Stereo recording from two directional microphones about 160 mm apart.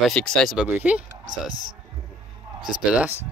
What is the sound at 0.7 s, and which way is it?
Speech, 10° right (ahead or behind).